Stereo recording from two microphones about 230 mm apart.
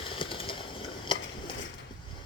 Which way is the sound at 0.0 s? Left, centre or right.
Left.